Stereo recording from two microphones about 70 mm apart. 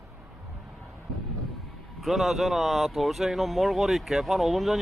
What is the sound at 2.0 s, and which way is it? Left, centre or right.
Speech, centre.